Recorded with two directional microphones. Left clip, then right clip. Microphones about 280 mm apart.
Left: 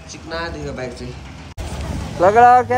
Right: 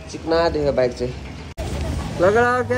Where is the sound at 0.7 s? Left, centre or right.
Centre.